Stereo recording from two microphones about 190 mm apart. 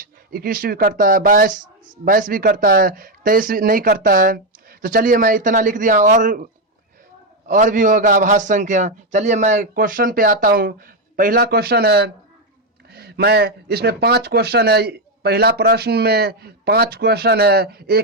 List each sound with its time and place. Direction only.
0.0 s speech: 50° right (ahead or behind)